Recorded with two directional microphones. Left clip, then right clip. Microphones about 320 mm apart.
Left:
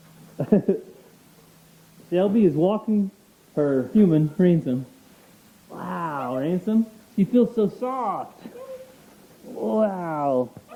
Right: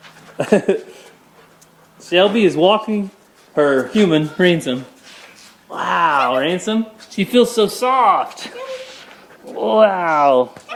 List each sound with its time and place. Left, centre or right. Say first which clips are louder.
0.3 s speech: right 7 dB; centre
2.0 s speech: right 7 dB; centre
9.7 s speech: right 12 dB; centre
10.3 s speech: right 9 dB; centre